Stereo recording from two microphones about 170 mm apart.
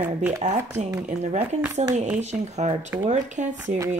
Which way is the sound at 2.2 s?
40° right (ahead or behind).